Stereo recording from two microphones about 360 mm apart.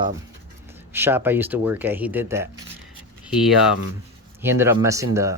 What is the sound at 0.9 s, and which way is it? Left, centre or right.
Speech, centre.